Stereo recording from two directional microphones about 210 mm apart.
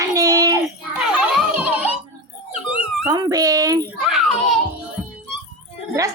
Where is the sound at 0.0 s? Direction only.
15° right (ahead or behind).